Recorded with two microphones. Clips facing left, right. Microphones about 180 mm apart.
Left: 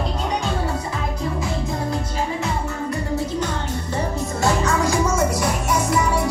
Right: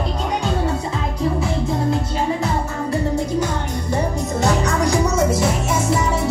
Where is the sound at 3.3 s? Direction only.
10° right (ahead or behind).